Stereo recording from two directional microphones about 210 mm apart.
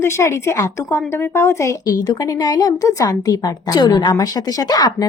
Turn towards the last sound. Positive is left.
turn(degrees=20)  # may be behind; listen again after turning